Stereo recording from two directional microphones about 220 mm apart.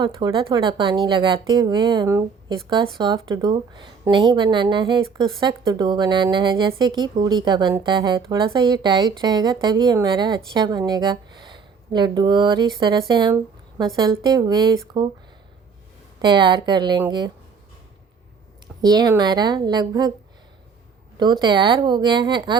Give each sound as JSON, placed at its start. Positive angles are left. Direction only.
{"t": 0.0, "sound": "a woman's voice", "side_deg": -20}
{"t": 16.2, "sound": "a woman's voice", "side_deg": -20}
{"t": 18.8, "sound": "a woman's voice", "side_deg": -15}
{"t": 21.2, "sound": "a woman's voice", "side_deg": -20}